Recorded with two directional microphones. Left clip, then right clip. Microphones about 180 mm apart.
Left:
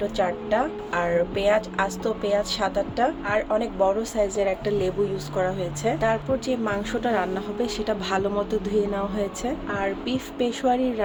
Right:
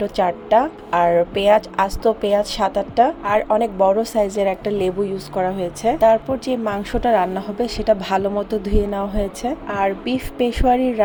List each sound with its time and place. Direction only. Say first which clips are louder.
0.0 s speech: right 5 dB; 35° right (ahead or behind)